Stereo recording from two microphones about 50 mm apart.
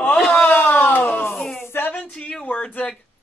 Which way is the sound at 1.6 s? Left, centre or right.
Left.